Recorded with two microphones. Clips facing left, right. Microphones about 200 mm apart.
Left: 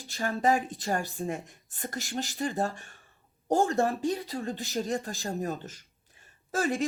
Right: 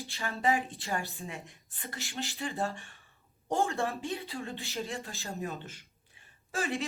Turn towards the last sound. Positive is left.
turn(degrees=40)  # may be behind; listen again after turning